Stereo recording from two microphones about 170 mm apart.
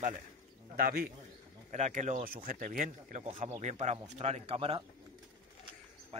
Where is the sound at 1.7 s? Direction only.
45° right (ahead or behind).